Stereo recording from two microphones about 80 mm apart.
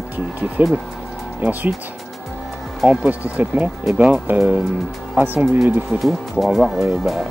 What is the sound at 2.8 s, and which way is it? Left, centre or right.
Speech, right.